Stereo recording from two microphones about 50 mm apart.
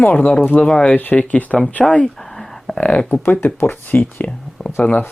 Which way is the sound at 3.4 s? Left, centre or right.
Left.